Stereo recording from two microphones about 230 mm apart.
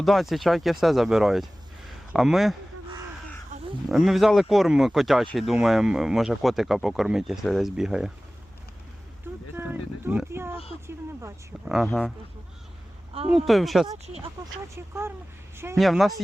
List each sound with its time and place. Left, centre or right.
0.0 s speech: centre
3.5 s a sound: right
3.8 s speech: centre
9.6 s speech: centre
11.9 s speech: centre
13.3 s speech: centre
13.8 s speech: right
14.8 s speech: centre